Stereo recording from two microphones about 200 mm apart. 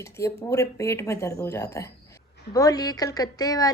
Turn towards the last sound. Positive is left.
turn(degrees=20)  # may be behind; listen again after turning